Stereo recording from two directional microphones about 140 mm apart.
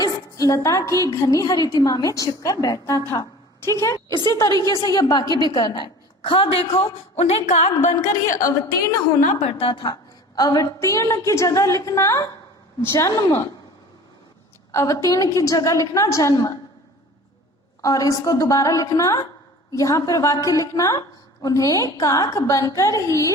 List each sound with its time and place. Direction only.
0.0 s a woman's voice: 25° left (ahead or behind); by 7.6 s 50° left (ahead or behind)
8.3 s a woman's voice: 70° left (ahead or behind)
9.6 s a woman's voice: 40° left (ahead or behind); by 13.5 s 20° left (ahead or behind)
14.7 s a woman's voice: 20° left (ahead or behind)
17.8 s a woman's voice: 25° left (ahead or behind)